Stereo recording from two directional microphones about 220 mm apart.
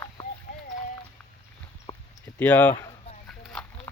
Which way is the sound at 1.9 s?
25° left (ahead or behind).